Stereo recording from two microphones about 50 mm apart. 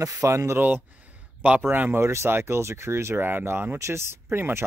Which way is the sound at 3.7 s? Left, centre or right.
Right.